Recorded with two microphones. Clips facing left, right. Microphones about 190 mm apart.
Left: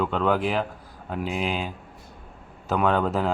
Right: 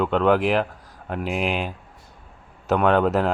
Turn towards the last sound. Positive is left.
turn(degrees=-5)  # may be behind; listen again after turning